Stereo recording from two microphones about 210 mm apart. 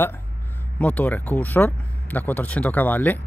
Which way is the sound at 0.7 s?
5° left (ahead or behind).